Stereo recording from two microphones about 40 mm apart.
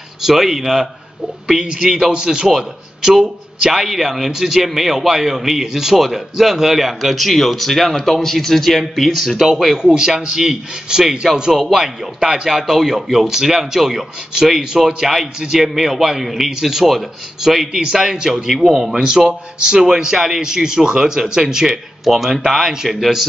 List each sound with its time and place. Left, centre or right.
0.2 s a man's voice: centre
9.8 s a man's voice: centre
16.8 s a man's voice: centre